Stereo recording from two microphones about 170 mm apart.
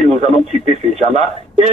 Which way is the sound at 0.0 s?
40° right (ahead or behind).